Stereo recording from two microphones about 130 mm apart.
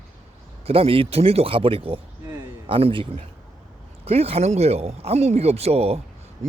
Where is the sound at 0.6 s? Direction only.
50° right (ahead or behind).